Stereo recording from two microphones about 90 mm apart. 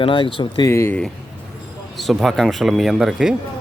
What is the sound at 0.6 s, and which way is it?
Speech, 30° left (ahead or behind).